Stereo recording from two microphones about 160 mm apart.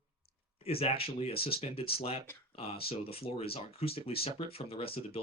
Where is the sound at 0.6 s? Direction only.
40° left (ahead or behind).